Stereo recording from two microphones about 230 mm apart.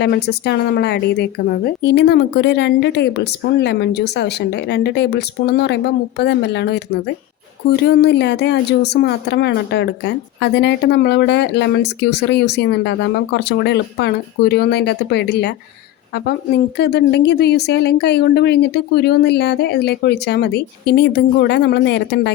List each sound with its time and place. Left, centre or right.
0.0 s speech: left
16.7 s speech: left